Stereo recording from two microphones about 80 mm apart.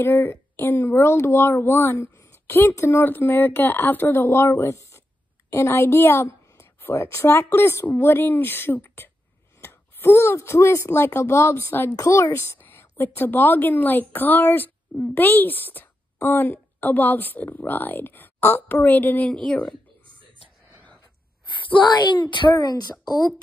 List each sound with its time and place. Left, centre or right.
0.0 s a woman's voice: left
11.9 s a woman's voice: left; by 19.7 s centre
21.6 s speech: left